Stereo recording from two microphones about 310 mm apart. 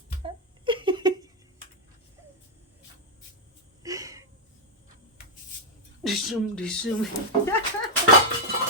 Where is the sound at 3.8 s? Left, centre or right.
Centre.